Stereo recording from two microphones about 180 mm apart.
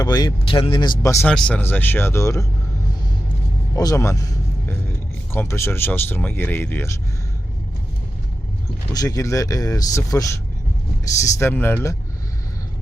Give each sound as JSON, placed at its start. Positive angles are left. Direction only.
{"t": 0.0, "sound": "speech", "side_deg": 25}
{"t": 1.3, "sound": "speech", "side_deg": 5}
{"t": 3.8, "sound": "speech", "side_deg": 20}
{"t": 8.9, "sound": "speech", "side_deg": 20}